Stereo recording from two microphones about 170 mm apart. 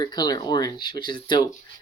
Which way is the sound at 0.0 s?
25° left (ahead or behind).